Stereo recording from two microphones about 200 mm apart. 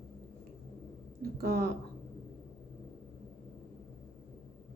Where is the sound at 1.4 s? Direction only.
50° right (ahead or behind).